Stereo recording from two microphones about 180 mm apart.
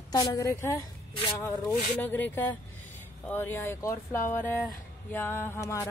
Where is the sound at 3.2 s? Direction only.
10° left (ahead or behind).